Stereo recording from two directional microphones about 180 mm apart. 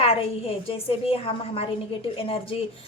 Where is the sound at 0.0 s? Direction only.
30° left (ahead or behind).